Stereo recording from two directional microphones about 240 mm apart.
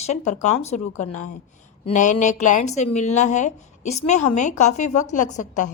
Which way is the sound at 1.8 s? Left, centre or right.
Left.